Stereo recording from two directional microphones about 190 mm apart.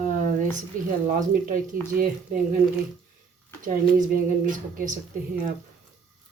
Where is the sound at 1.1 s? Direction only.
45° right (ahead or behind).